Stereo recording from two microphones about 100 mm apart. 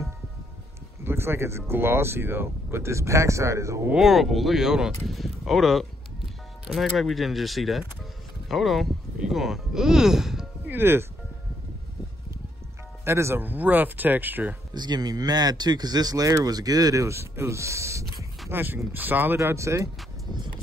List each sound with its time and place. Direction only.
1.0 s speech: 25° right (ahead or behind)
3.9 s speech: 5° right (ahead or behind)
10.7 s speech: 20° right (ahead or behind)
13.0 s speech: 25° right (ahead or behind)
14.7 s speech: 45° right (ahead or behind)